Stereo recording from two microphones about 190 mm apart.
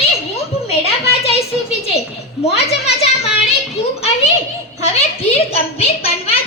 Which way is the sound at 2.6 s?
35° left (ahead or behind).